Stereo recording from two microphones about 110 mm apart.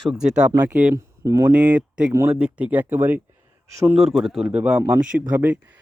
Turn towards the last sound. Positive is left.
turn(degrees=-15)  # may be behind; listen again after turning